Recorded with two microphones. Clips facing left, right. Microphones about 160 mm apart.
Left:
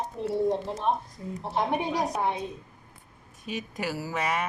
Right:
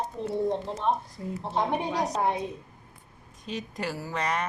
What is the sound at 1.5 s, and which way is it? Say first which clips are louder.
Speech: even; 10° left (ahead or behind).